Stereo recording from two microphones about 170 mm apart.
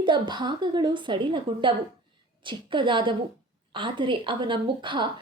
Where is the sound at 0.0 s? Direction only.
25° right (ahead or behind).